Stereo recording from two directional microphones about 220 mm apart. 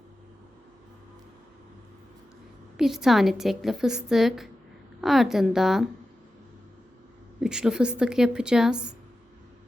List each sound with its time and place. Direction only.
2.7 s a woman's voice: centre (ahead or behind)
7.4 s a woman's voice: 5° right (ahead or behind)